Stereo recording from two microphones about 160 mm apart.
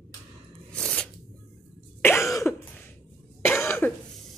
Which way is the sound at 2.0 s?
15° left (ahead or behind).